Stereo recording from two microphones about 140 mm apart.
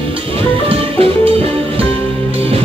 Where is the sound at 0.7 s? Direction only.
45° right (ahead or behind).